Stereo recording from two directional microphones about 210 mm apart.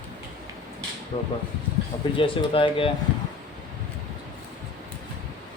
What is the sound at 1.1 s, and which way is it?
Speech, 30° left (ahead or behind).